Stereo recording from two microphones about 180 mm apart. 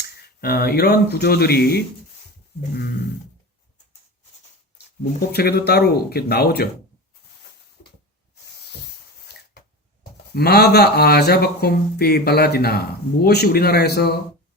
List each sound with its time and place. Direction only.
0.0 s speech: 60° left (ahead or behind)
5.3 s speech: 60° left (ahead or behind)
10.0 s speech: 60° left (ahead or behind)